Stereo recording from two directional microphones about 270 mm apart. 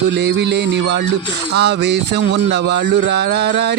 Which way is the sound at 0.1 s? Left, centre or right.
Right.